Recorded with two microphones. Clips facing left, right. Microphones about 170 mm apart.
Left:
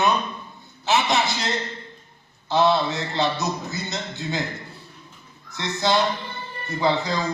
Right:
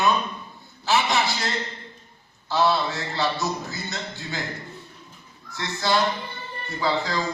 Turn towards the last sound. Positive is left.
turn(degrees=20)  # may be behind; listen again after turning